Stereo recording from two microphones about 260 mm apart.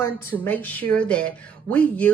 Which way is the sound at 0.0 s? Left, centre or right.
Centre.